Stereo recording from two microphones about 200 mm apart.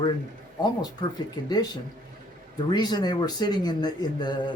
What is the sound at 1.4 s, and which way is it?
Speech, 20° left (ahead or behind).